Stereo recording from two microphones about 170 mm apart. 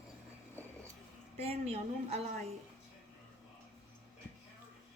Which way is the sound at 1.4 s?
35° right (ahead or behind).